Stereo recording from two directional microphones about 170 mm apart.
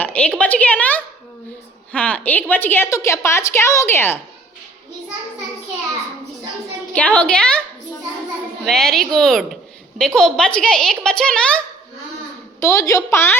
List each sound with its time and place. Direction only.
0.0 s a sound: 10° left (ahead or behind)
1.9 s a woman's voice: 10° left (ahead or behind)
6.9 s a woman's voice: 10° left (ahead or behind)
8.6 s a child's voice: 5° left (ahead or behind)
12.5 s a woman's voice: 20° left (ahead or behind)